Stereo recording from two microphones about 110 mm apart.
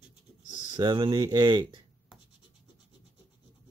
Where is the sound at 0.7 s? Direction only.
45° right (ahead or behind).